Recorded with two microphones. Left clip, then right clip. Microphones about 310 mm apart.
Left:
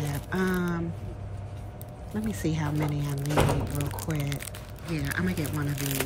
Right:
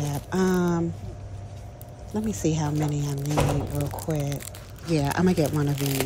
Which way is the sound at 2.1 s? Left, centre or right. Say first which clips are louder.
Right 5 dB; centre.